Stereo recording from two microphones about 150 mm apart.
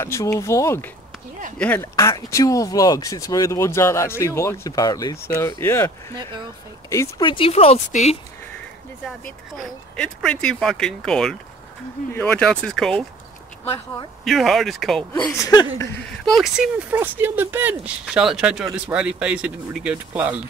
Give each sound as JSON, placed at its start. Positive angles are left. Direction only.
{"t": 0.0, "sound": "speech", "side_deg": 20}
{"t": 7.2, "sound": "speech", "side_deg": 35}
{"t": 9.0, "sound": "speech", "side_deg": 5}
{"t": 14.2, "sound": "speech", "side_deg": 0}
{"t": 15.3, "sound": "speech", "side_deg": 20}
{"t": 16.1, "sound": "speech", "side_deg": 0}
{"t": 18.0, "sound": "speech", "side_deg": -5}